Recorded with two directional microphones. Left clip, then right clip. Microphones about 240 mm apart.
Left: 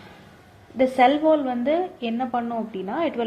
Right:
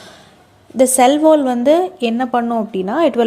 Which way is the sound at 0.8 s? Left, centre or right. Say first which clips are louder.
Right 7 dB; right.